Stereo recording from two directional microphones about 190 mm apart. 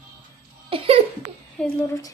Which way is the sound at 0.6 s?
30° right (ahead or behind).